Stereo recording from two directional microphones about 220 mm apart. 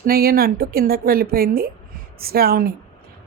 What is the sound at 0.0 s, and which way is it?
A woman's voice, 45° right (ahead or behind).